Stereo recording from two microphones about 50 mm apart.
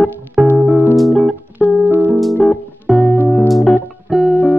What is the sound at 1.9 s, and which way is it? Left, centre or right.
Music, right.